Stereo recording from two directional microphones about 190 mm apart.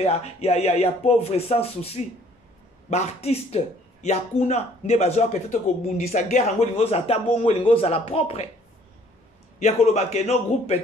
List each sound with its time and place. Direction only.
0.0 s speech: 35° left (ahead or behind)
9.6 s speech: 35° left (ahead or behind)